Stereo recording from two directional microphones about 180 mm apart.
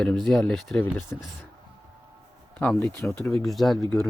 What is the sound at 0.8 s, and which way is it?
Speech, 15° left (ahead or behind).